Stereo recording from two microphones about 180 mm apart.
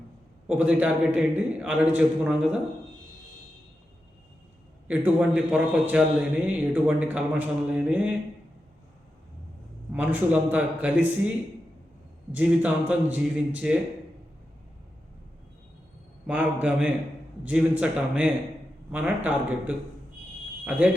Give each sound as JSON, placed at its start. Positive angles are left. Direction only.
{"t": 0.4, "sound": "a man's voice", "side_deg": -5}
{"t": 4.9, "sound": "a man's voice", "side_deg": -10}
{"t": 9.9, "sound": "a man's voice", "side_deg": -10}
{"t": 12.3, "sound": "a man's voice", "side_deg": -10}
{"t": 16.2, "sound": "a man's voice", "side_deg": -10}